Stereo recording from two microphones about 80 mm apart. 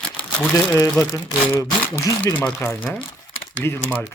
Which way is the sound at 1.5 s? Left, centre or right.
Left.